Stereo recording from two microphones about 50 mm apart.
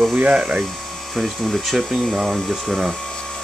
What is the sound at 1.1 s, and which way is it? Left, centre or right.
Speech, centre.